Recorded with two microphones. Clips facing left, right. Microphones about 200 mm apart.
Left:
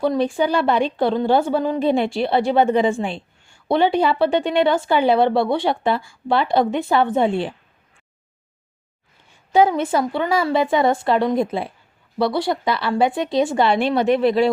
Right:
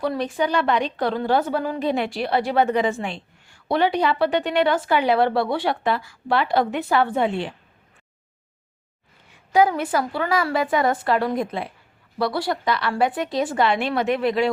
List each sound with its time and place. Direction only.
0.3 s a woman's voice: 30° left (ahead or behind)
9.5 s a woman's voice: 25° left (ahead or behind)